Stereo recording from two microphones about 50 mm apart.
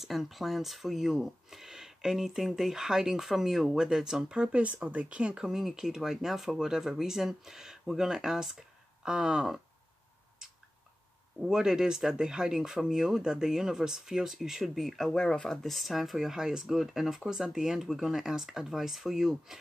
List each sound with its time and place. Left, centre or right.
0.0 s speech: centre; by 5.4 s right
5.4 s speech: centre
11.3 s speech: centre